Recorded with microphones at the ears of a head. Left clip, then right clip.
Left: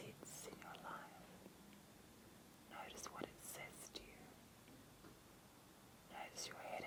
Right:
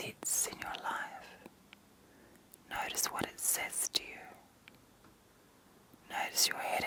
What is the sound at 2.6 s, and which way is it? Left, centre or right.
Whispering, right.